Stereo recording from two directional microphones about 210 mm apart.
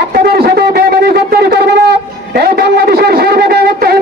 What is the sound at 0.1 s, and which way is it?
Shofar, 50° right (ahead or behind).